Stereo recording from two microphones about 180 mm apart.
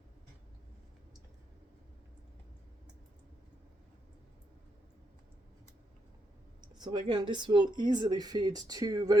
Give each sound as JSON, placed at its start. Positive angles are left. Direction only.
{"t": 6.7, "sound": "speech", "side_deg": -25}